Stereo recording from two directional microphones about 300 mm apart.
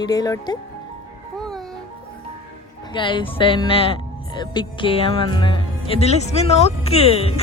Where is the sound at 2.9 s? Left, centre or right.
Centre.